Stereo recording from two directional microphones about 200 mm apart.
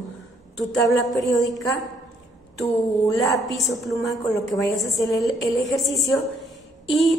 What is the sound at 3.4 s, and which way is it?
A woman's voice, centre (ahead or behind).